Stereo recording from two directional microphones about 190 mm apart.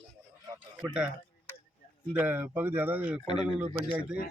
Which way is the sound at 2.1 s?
10° right (ahead or behind).